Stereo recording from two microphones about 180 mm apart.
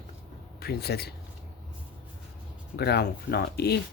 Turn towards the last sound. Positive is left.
turn(degrees=65)  # may be behind; listen again after turning